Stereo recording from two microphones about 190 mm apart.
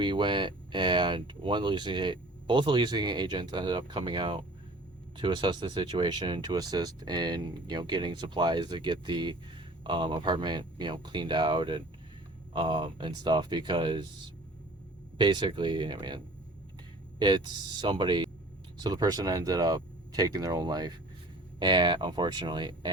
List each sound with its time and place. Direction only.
0.0 s speech: 25° right (ahead or behind)
15.2 s speech: 25° right (ahead or behind)